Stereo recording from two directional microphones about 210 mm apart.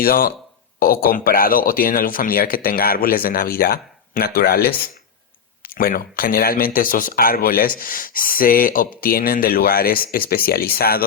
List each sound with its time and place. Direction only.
0.0 s speech: 45° left (ahead or behind)